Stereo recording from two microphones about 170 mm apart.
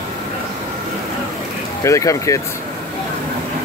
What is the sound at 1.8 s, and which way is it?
Speech, 20° left (ahead or behind).